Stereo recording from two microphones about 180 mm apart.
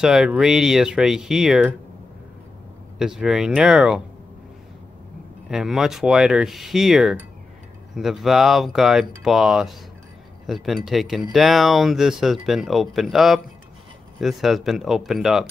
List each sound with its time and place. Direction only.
0.0 s speech: 5° right (ahead or behind)
3.0 s speech: 5° right (ahead or behind)
5.5 s speech: 5° right (ahead or behind)